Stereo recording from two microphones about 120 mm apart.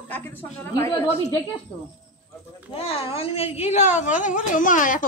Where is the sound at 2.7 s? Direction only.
55° left (ahead or behind).